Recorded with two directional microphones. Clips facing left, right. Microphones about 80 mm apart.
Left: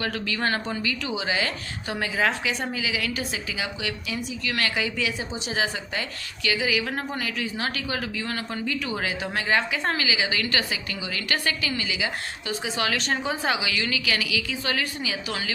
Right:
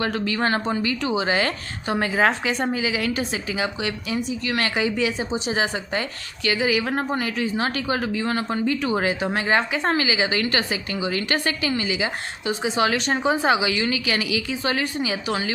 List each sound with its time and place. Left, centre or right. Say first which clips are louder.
0.0 s a woman's voice: right 4 dB; right